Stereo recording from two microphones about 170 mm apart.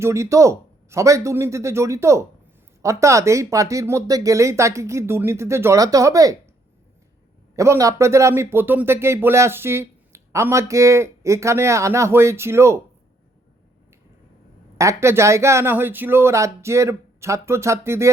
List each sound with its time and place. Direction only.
0.0 s speech: 15° right (ahead or behind)
7.5 s speech: 15° right (ahead or behind)
14.8 s speech: 15° right (ahead or behind)